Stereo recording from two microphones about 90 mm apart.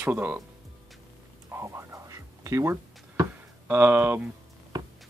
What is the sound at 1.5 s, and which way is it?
Music, 30° right (ahead or behind).